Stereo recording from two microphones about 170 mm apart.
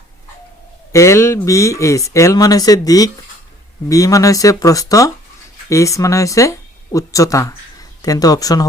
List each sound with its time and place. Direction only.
0.9 s speech: 15° left (ahead or behind)